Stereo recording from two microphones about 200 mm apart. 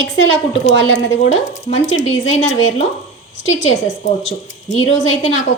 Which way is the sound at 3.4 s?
70° left (ahead or behind).